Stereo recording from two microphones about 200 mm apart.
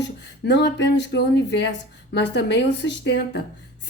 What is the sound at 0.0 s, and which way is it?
A woman's voice, 60° left (ahead or behind).